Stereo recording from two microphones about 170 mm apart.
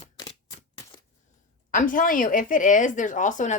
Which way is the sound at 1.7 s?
50° left (ahead or behind).